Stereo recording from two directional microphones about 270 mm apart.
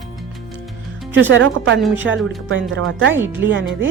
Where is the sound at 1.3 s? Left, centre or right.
Right.